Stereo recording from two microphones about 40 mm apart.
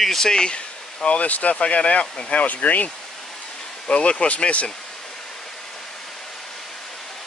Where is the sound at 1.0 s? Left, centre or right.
Left.